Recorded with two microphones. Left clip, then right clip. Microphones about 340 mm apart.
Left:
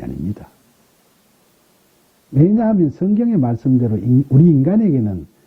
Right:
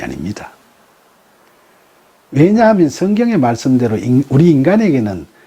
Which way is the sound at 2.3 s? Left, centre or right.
Centre.